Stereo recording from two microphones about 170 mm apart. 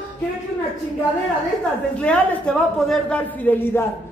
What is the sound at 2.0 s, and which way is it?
A man's voice, 5° left (ahead or behind).